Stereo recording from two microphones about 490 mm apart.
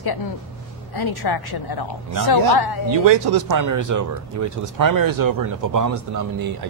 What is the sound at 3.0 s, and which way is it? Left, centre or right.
Speech, right.